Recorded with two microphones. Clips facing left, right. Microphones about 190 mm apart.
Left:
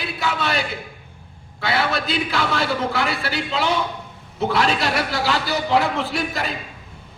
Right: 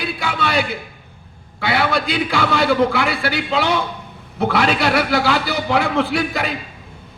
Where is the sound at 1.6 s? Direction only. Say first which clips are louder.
Right 3 dB; 60° right (ahead or behind).